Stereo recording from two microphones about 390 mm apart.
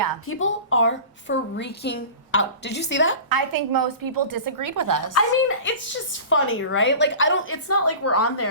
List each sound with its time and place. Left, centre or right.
0.3 s a woman's voice: left
3.2 s a woman's voice: right
5.1 s a woman's voice: left